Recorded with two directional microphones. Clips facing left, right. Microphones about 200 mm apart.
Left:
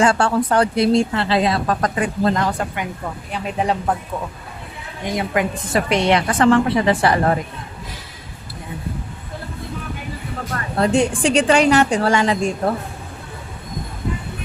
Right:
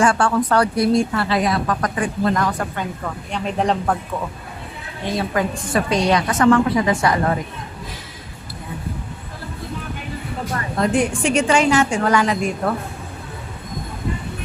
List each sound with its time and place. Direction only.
0.2 s speech: 30° left (ahead or behind)
3.3 s speech: 5° left (ahead or behind)
5.0 s speech: 20° left (ahead or behind)
10.8 s a woman's voice: 30° left (ahead or behind)
11.5 s a woman's voice: 65° left (ahead or behind)
11.9 s a woman's voice: 35° left (ahead or behind)